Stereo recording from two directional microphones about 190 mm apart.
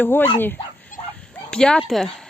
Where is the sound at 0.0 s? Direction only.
10° left (ahead or behind).